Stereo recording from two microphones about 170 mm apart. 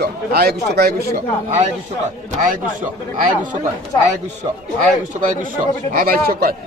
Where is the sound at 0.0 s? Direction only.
65° right (ahead or behind).